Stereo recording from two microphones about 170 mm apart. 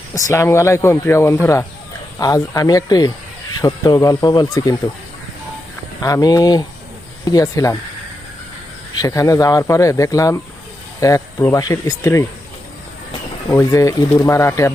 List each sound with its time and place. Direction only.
0.1 s speech: 15° left (ahead or behind)
6.0 s speech: 20° left (ahead or behind)
9.0 s speech: 20° left (ahead or behind)
13.5 s speech: 20° left (ahead or behind)